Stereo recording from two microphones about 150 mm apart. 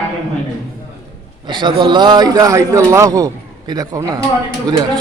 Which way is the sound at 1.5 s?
30° right (ahead or behind).